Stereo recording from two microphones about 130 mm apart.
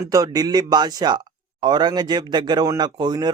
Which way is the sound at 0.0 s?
25° right (ahead or behind).